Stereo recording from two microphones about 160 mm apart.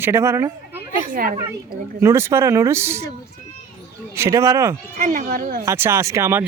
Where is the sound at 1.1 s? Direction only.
65° right (ahead or behind).